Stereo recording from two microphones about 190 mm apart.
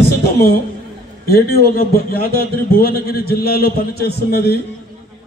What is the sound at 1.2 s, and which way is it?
A man's voice, 55° left (ahead or behind).